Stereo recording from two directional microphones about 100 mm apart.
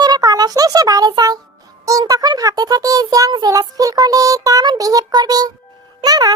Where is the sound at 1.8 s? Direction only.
35° right (ahead or behind).